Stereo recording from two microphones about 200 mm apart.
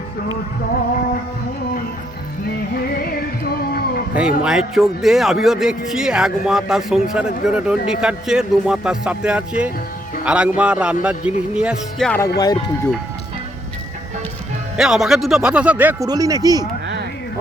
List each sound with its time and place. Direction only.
2.7 s music: 50° left (ahead or behind)
3.7 s a sound: 50° left (ahead or behind)
4.1 s a man's voice: 5° right (ahead or behind)
12.4 s speech: 20° left (ahead or behind)
14.8 s a man's voice: centre (ahead or behind); by 16.6 s 20° right (ahead or behind)